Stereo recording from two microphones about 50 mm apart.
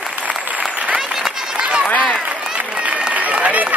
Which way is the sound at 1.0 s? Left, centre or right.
Centre.